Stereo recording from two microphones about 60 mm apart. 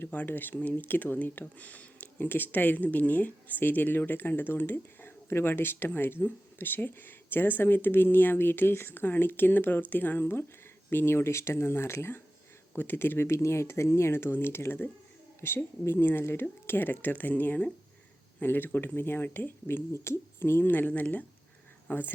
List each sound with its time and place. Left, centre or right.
0.1 s speech: left
12.7 s speech: left
13.3 s speech: left
19.6 s speech: left